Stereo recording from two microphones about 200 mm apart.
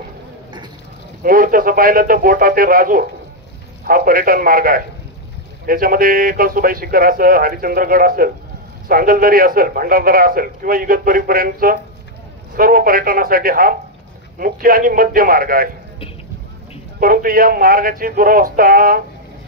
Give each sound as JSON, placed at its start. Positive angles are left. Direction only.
{"t": 1.2, "sound": "a man's voice", "side_deg": -45}
{"t": 17.0, "sound": "a man's voice", "side_deg": -45}